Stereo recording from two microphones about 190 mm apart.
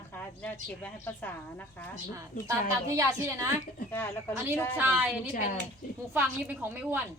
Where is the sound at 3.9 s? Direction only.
10° left (ahead or behind).